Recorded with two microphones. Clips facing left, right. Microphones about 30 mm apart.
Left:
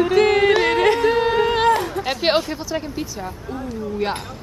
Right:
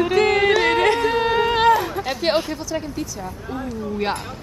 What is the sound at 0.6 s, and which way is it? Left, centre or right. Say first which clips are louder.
Yodeling: left 1 dB; centre.